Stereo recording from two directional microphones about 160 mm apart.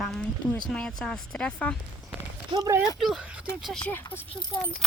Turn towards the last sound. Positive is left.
turn(degrees=20)  # may be behind; listen again after turning